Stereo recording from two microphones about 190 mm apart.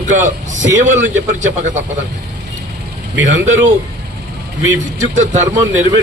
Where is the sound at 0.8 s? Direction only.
40° right (ahead or behind).